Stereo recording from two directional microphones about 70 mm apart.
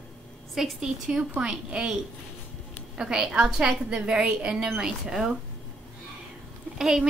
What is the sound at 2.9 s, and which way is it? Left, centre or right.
A woman's voice, centre.